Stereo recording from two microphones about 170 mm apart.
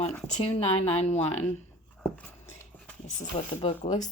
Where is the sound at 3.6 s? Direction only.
40° left (ahead or behind).